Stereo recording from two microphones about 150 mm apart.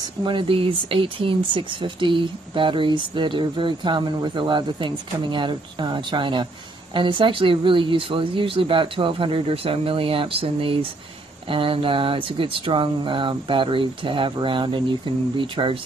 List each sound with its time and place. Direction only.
0.2 s speech: 35° right (ahead or behind)